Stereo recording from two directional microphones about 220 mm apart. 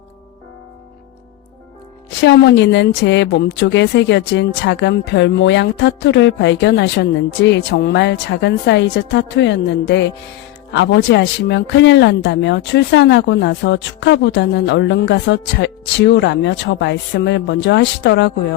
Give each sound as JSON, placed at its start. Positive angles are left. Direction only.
{"t": 2.2, "sound": "a woman's voice", "side_deg": 50}